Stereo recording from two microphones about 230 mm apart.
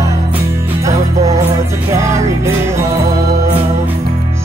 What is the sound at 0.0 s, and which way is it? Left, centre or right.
Music, centre.